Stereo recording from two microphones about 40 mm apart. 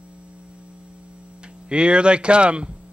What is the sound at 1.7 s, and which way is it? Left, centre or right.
Speech, right.